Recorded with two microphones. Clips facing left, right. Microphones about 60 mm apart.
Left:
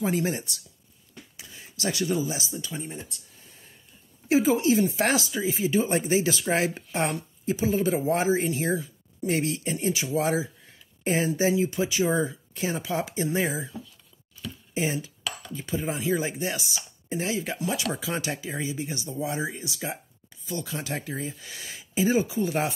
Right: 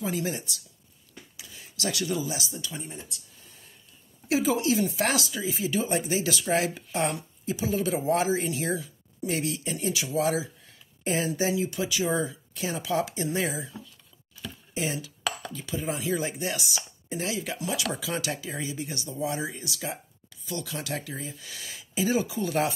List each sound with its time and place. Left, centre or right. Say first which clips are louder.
0.0 s speech: left 4 dB; left
4.3 s speech: left 3 dB; left
9.2 s speech: left 3 dB; left
14.9 s speech: left 1 dB; left
22.3 s speech: left 1 dB; centre